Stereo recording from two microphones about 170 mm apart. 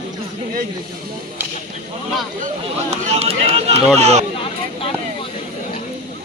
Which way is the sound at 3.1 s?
35° right (ahead or behind).